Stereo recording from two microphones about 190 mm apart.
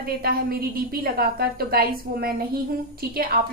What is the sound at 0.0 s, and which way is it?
A woman's voice, 50° right (ahead or behind).